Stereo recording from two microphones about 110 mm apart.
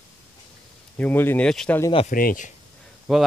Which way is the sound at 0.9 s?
15° left (ahead or behind).